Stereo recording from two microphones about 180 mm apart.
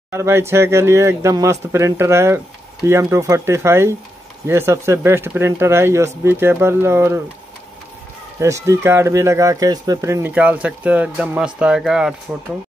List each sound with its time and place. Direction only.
0.1 s speech: 15° right (ahead or behind)
8.4 s speech: 15° right (ahead or behind)